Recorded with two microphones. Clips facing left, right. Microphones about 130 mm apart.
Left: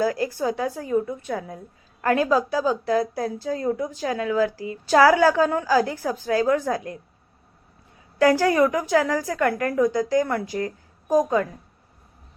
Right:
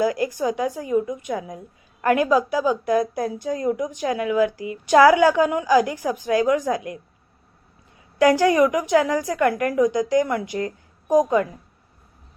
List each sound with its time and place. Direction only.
0.0 s a woman's voice: 20° right (ahead or behind)
8.2 s a woman's voice: 20° right (ahead or behind)